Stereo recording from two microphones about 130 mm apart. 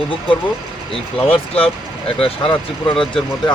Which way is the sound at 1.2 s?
45° left (ahead or behind).